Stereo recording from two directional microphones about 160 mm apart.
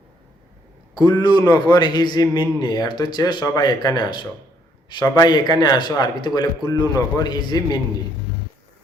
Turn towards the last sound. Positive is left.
turn(degrees=25)  # may be behind; listen again after turning